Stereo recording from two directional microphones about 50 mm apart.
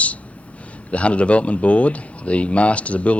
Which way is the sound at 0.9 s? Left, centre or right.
Left.